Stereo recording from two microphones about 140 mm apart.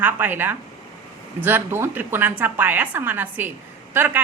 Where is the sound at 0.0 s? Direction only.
15° right (ahead or behind).